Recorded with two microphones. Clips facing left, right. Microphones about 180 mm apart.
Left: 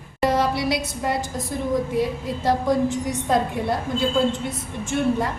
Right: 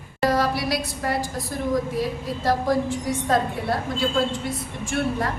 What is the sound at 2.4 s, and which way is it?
Speech, 20° left (ahead or behind).